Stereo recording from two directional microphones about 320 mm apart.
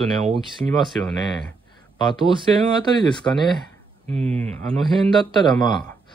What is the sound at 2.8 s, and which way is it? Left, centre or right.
Speech, centre.